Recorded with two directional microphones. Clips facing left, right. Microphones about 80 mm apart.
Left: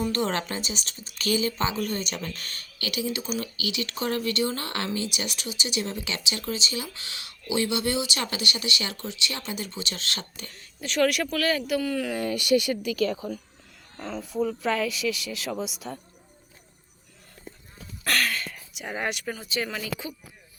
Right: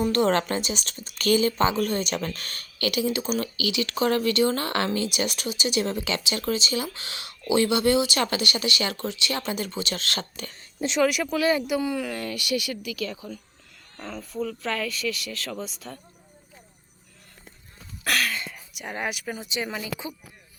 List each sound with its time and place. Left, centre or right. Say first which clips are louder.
0.0 s speech: right 5 dB; right
3.4 s speech: right 4 dB; right
5.1 s speech: right 5 dB; right
10.5 s speech: right 10 dB; right
10.9 s speech: even; centre
12.1 s speech: left 5 dB; left
14.0 s speech: left 3 dB; centre
18.0 s a sound: even; centre
19.4 s speech: even; centre